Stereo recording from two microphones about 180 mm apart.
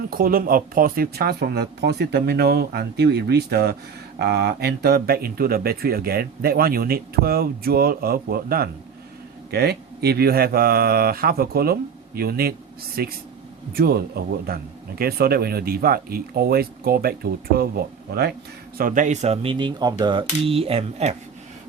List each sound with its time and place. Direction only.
0.1 s speech: 55° right (ahead or behind)
18.8 s speech: 50° right (ahead or behind)